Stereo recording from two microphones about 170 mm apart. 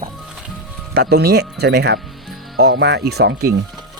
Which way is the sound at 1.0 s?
70° right (ahead or behind).